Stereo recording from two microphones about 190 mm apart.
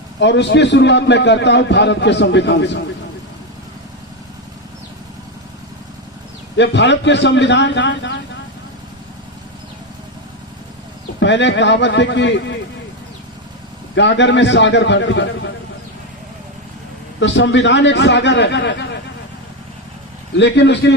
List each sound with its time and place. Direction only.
0.2 s a man's voice: 65° left (ahead or behind)
6.6 s a man's voice: 70° left (ahead or behind)
11.2 s a man's voice: 70° left (ahead or behind)
13.9 s a man's voice: 70° left (ahead or behind)
17.2 s a man's voice: 70° left (ahead or behind)
20.3 s a man's voice: 65° left (ahead or behind)